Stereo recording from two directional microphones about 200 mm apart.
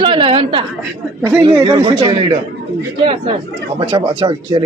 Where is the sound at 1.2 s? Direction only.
15° right (ahead or behind).